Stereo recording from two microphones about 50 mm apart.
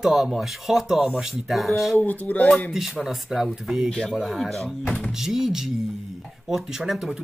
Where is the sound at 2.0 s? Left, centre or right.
Left.